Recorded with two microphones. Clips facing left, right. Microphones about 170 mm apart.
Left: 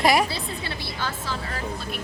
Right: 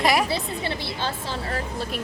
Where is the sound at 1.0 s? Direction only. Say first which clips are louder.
Right 2 dB; 30° right (ahead or behind).